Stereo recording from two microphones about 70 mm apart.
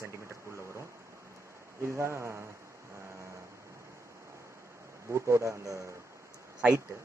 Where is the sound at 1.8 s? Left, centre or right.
Right.